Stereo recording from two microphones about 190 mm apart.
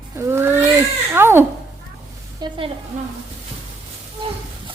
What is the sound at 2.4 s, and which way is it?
Speech, 25° right (ahead or behind).